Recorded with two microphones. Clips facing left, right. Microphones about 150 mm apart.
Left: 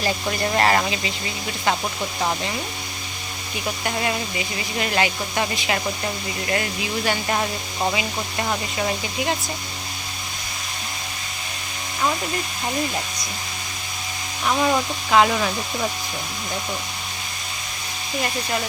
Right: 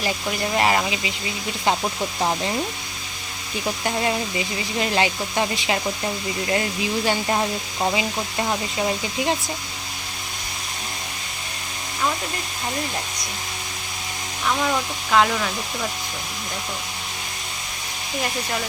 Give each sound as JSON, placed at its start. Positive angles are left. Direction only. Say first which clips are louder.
{"t": 0.0, "sound": "speech", "louder": "left 1 dB", "side_deg": -15}
{"t": 3.8, "sound": "speech", "louder": "right 1 dB", "side_deg": -25}
{"t": 7.3, "sound": "speech", "louder": "right 1 dB", "side_deg": -5}
{"t": 14.4, "sound": "speech", "louder": "left 3 dB", "side_deg": 15}